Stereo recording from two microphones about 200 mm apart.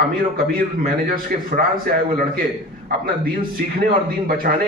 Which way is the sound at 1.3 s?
45° right (ahead or behind).